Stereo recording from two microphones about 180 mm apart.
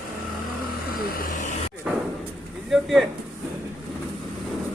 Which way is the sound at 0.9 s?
50° left (ahead or behind).